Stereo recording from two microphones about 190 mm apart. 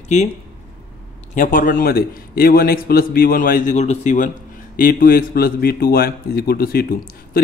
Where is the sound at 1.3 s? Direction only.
45° left (ahead or behind).